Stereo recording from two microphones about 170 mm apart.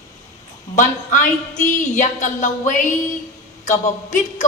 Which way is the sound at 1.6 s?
45° left (ahead or behind).